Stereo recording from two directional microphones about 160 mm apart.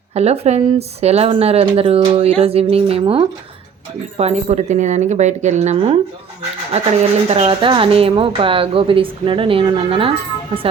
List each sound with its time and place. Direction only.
0.1 s speech: 40° right (ahead or behind)
4.2 s a woman's voice: 40° right (ahead or behind)
7.3 s speech: 40° right (ahead or behind)